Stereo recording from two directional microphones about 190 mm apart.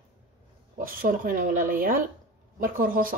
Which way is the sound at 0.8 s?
45° right (ahead or behind).